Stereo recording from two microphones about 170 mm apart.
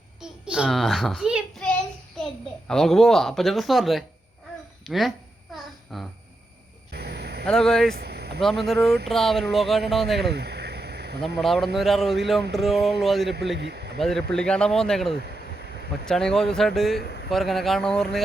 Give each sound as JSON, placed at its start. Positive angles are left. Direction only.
{"t": 0.2, "sound": "a child's voice", "side_deg": -5}
{"t": 5.5, "sound": "babbling", "side_deg": 0}
{"t": 6.9, "sound": "a sound", "side_deg": -75}
{"t": 7.4, "sound": "a child's voice", "side_deg": 5}
{"t": 7.9, "sound": "vehicle", "side_deg": -70}
{"t": 8.4, "sound": "a child's voice", "side_deg": 0}
{"t": 10.3, "sound": "a sound", "side_deg": -75}
{"t": 11.3, "sound": "a child's voice", "side_deg": 0}
{"t": 13.6, "sound": "speech", "side_deg": -90}
{"t": 14.0, "sound": "a child's voice", "side_deg": 5}